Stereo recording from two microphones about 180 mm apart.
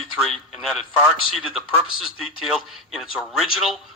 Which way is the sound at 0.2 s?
Centre (ahead or behind).